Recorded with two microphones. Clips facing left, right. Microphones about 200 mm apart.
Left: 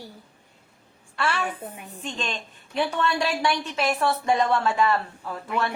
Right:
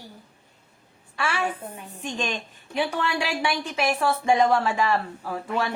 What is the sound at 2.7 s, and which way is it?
Speech, 10° right (ahead or behind).